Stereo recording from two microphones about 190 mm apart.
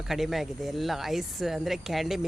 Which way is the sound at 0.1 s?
Centre (ahead or behind).